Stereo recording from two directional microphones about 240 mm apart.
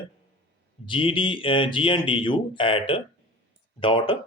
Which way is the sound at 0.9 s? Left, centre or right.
Left.